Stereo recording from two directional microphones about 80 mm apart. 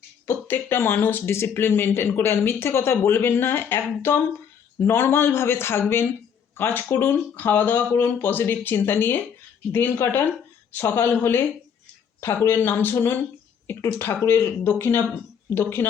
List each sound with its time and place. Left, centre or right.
0.3 s speech: left